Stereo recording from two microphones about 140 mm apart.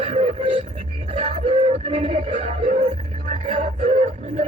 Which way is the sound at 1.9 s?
50° right (ahead or behind).